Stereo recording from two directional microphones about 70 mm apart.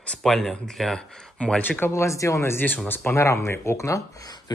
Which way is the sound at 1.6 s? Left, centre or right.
Left.